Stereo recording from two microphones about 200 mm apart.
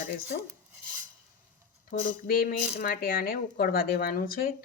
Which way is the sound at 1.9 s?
45° left (ahead or behind).